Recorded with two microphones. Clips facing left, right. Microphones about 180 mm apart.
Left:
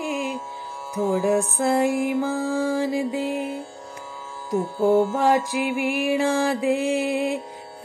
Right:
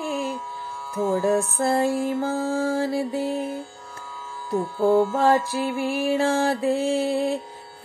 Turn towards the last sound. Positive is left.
turn(degrees=15)  # may be behind; listen again after turning